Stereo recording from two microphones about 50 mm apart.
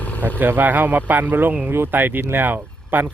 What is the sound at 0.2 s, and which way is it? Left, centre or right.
Speech, right.